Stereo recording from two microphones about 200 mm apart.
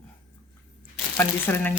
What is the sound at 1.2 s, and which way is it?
Speech, 10° left (ahead or behind).